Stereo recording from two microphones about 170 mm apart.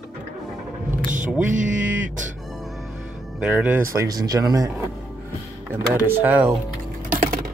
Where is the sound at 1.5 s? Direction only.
50° right (ahead or behind).